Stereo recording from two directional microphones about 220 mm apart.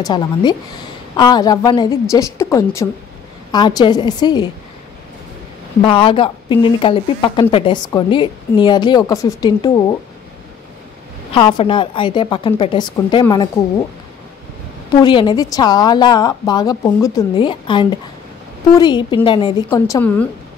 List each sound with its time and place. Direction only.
0.0 s a woman's voice: 20° left (ahead or behind)
5.8 s speech: 25° left (ahead or behind)
11.3 s speech: 20° left (ahead or behind)
15.0 s speech: 20° left (ahead or behind)
19.7 s a woman's voice: 10° left (ahead or behind)